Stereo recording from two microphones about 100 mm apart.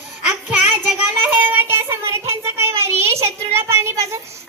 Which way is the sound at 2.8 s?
25° right (ahead or behind).